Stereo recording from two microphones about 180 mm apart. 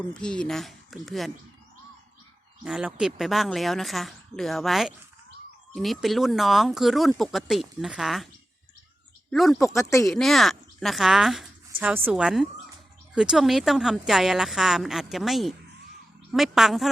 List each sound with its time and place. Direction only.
0.1 s speech: 5° left (ahead or behind)
2.6 s speech: 5° right (ahead or behind)
9.3 s speech: centre (ahead or behind)
9.6 s speech: 15° left (ahead or behind)
10.1 s speech: centre (ahead or behind)